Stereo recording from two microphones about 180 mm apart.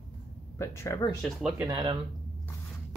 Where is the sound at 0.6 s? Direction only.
15° left (ahead or behind).